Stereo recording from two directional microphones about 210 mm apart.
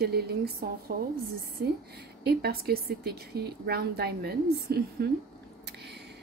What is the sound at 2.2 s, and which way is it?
A woman's voice, 50° right (ahead or behind).